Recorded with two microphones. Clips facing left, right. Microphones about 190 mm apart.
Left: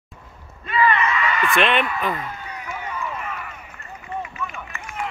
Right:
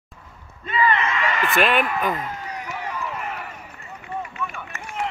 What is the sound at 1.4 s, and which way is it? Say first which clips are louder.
Speech: even; centre (ahead or behind).